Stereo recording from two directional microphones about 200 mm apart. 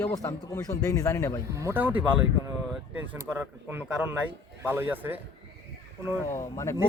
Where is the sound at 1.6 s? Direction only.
10° right (ahead or behind).